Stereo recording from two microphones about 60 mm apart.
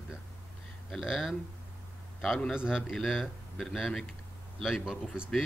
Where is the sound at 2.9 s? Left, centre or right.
Centre.